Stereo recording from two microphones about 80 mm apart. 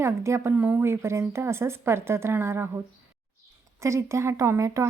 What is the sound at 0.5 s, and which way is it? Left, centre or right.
Speech, right.